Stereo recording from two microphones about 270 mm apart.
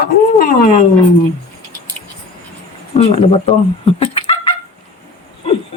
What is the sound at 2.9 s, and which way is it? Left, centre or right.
Speech, left.